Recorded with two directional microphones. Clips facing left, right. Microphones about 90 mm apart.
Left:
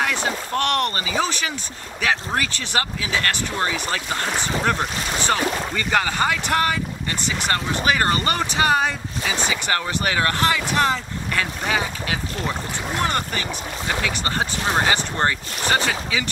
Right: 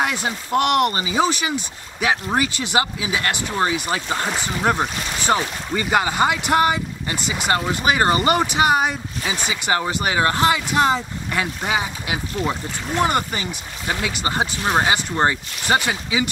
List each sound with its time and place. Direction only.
0.0 s speech: 15° right (ahead or behind)